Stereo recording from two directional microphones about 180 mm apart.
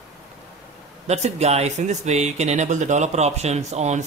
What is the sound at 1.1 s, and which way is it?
Speech, 40° right (ahead or behind).